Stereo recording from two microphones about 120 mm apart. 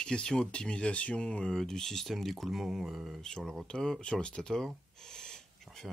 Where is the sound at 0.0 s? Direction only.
10° left (ahead or behind).